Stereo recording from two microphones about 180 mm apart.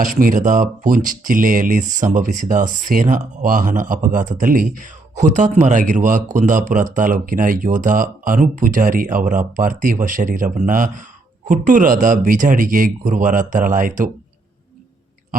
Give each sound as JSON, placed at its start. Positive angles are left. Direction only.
{"t": 0.0, "sound": "speech", "side_deg": -50}